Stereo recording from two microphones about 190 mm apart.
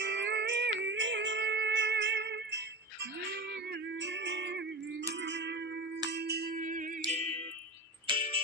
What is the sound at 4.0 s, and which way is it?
Music, 70° right (ahead or behind).